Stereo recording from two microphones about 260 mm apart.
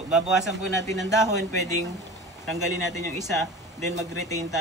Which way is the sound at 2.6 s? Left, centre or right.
Centre.